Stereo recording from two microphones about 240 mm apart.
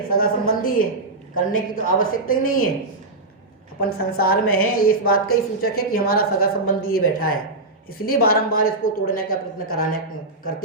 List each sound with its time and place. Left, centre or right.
0.1 s a woman's voice: left
3.8 s a woman's voice: left